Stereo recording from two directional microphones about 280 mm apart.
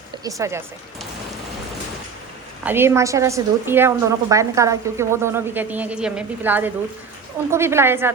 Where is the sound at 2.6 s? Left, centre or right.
Centre.